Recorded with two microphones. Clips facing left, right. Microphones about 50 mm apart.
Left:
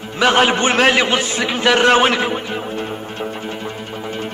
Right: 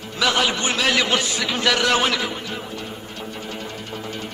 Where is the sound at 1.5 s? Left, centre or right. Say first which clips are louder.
Left 7 dB; left.